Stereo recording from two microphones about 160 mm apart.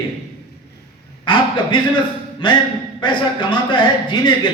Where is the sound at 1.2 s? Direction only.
30° left (ahead or behind).